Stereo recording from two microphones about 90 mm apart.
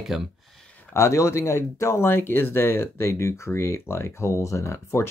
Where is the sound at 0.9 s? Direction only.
30° left (ahead or behind).